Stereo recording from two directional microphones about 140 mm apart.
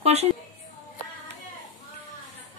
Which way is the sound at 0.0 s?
50° right (ahead or behind).